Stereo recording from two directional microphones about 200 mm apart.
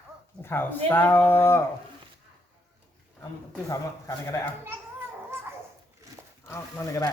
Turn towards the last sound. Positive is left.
turn(degrees=15)  # may be behind; listen again after turning